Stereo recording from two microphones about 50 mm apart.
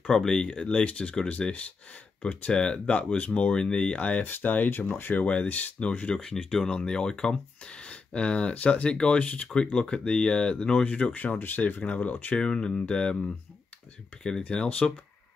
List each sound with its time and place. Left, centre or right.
0.1 s speech: centre
3.6 s speech: centre
3.9 s speech: left
5.2 s speech: left
6.1 s speech: centre; by 11.3 s left
11.3 s speech: left
12.4 s speech: centre
14.5 s speech: left